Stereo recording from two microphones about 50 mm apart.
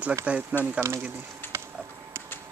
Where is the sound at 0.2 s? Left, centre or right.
Right.